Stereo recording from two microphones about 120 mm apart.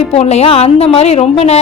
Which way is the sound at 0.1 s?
60° left (ahead or behind).